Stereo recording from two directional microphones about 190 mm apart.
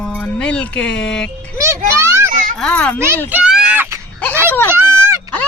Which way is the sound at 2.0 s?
15° right (ahead or behind).